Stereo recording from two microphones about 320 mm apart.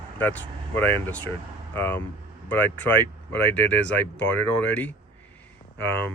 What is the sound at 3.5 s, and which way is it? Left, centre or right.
Speech, centre.